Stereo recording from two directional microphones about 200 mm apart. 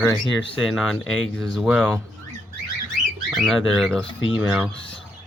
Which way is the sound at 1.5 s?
5° right (ahead or behind).